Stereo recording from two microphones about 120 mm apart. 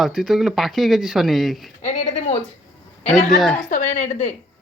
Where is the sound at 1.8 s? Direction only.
85° left.